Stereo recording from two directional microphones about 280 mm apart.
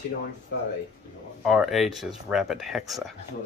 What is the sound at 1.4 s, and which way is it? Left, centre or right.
Speech, centre.